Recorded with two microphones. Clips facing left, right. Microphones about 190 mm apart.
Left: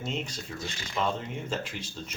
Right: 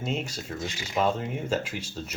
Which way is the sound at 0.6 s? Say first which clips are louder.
Right 5 dB; 15° right (ahead or behind).